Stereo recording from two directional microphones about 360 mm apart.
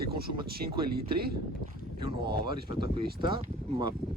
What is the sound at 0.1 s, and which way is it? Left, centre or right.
Speech, right.